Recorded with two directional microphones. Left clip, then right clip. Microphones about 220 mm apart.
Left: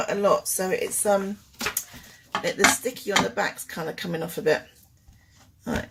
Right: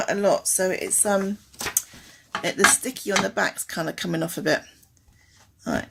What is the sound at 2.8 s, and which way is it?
Speech, 40° right (ahead or behind).